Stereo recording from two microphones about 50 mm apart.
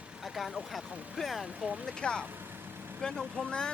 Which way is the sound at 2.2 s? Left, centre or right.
Right.